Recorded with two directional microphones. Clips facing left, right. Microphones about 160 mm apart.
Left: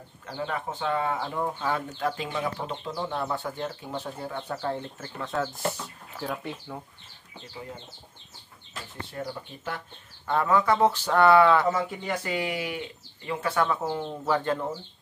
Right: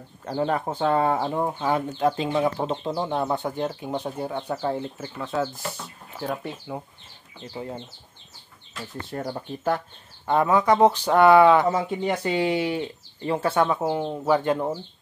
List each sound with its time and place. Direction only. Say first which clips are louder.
0.2 s speech: right 8 dB; 40° right (ahead or behind)
1.4 s speech: right 4 dB; 20° right (ahead or behind)
6.1 s speech: right 3 dB; 20° right (ahead or behind)
9.1 s speech: right 5 dB; 45° right (ahead or behind)
10.2 s speech: right 3 dB; 20° right (ahead or behind)